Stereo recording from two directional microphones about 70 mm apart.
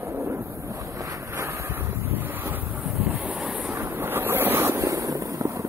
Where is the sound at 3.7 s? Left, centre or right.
Right.